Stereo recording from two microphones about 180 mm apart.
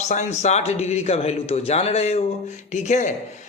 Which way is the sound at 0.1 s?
40° left (ahead or behind).